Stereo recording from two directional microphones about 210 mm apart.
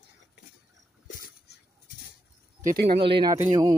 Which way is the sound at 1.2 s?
50° left (ahead or behind).